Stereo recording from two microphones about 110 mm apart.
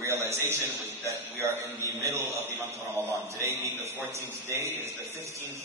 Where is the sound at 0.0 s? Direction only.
25° right (ahead or behind).